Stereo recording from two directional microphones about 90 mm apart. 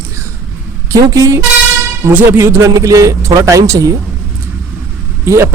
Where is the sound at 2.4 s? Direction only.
35° right (ahead or behind).